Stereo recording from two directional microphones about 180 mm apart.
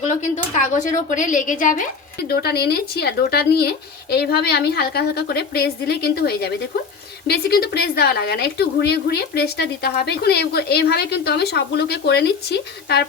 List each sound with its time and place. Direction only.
0.0 s speech: 45° left (ahead or behind)
2.2 s a woman's voice: 60° left (ahead or behind)